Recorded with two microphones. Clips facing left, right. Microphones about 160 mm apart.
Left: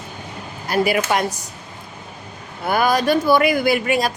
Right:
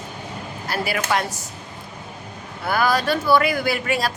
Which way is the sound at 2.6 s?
20° left (ahead or behind).